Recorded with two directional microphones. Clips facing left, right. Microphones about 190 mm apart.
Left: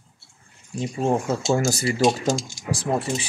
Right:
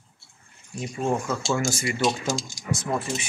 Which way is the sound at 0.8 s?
30° left (ahead or behind).